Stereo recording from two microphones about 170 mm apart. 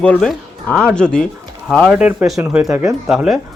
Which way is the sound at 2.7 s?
20° right (ahead or behind).